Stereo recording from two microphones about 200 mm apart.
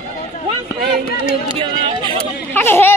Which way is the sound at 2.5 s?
10° left (ahead or behind).